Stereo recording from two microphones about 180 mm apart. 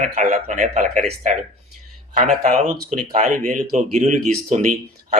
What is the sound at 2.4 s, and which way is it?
Speech, 40° right (ahead or behind).